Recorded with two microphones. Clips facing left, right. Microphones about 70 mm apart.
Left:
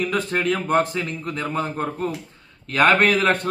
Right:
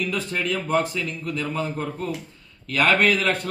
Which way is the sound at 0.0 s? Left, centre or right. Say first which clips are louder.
Left 4 dB; left.